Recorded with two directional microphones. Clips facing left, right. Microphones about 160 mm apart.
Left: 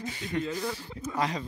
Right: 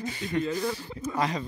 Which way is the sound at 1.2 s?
70° right (ahead or behind).